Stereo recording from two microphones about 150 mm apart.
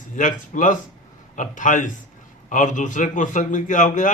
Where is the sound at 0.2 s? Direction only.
60° left (ahead or behind).